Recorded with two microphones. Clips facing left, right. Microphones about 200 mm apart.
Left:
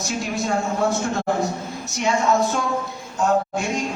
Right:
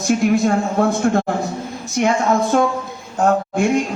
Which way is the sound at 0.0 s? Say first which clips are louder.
Right 10 dB; 55° right (ahead or behind).